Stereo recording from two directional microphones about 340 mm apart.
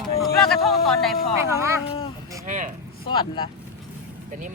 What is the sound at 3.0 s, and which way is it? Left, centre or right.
Speech, centre.